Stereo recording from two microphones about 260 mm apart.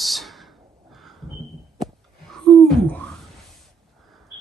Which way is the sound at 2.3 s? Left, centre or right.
Centre.